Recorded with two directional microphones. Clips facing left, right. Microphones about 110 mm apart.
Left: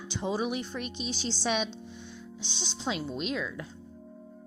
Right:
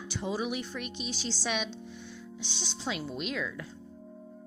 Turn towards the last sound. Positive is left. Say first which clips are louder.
# left 2 dB
turn(degrees=20)  # may be behind; listen again after turning